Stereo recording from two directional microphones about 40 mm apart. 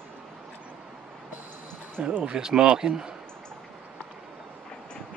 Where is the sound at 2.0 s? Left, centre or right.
Right.